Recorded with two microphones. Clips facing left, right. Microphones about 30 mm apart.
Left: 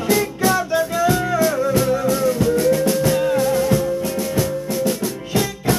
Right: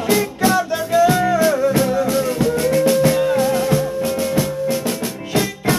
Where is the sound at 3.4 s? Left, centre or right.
Right.